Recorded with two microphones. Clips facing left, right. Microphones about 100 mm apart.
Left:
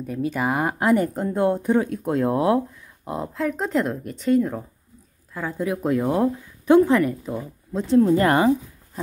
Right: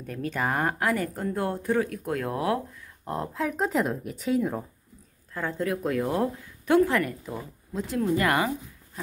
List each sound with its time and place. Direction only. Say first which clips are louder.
0.0 s speech: left 5 dB; 10° left (ahead or behind)
0.7 s speech: left 7 dB; 20° left (ahead or behind)
3.1 s speech: left 3 dB; centre (ahead or behind)
5.3 s speech: left 3 dB; 10° left (ahead or behind); by 9.0 s 30° left (ahead or behind)